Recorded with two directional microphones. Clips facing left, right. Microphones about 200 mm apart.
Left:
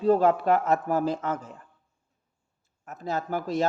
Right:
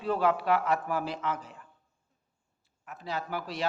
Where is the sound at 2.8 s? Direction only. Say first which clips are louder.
Left 5 dB; 45° left (ahead or behind).